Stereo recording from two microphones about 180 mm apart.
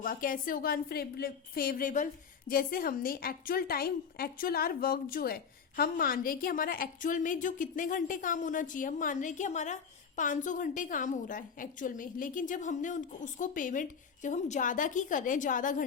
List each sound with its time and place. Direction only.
0.0 s a woman's voice: 50° left (ahead or behind)